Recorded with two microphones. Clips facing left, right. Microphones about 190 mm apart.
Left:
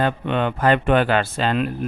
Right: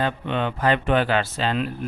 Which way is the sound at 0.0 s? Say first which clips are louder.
Left 3 dB; 55° left (ahead or behind).